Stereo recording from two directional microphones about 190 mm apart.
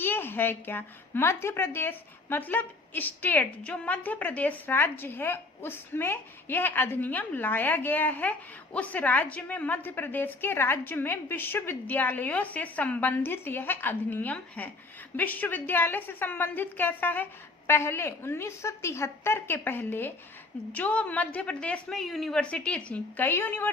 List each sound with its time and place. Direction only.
0.0 s a woman's voice: 10° left (ahead or behind)